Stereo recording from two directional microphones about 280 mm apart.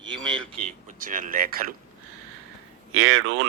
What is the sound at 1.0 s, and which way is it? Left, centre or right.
Speech, right.